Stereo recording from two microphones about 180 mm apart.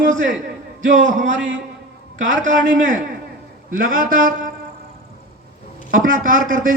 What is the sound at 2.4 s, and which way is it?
A man's voice, 45° right (ahead or behind).